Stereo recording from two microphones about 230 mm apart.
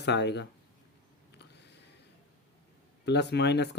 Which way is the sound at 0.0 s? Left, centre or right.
Left.